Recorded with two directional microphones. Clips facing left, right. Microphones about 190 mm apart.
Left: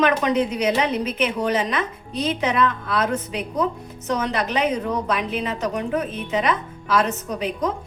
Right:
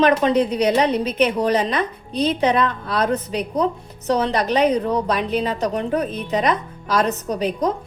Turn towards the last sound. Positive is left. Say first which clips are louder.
# right 4 dB
turn(degrees=-35)  # may be behind; listen again after turning